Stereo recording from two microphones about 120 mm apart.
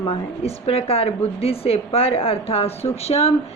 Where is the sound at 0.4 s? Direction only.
55° left (ahead or behind).